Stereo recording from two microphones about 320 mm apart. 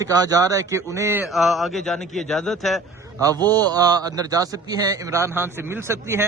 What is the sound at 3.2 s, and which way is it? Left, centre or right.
A man's voice, centre.